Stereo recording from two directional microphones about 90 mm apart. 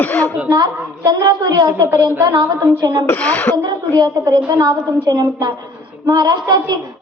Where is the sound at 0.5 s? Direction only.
45° right (ahead or behind).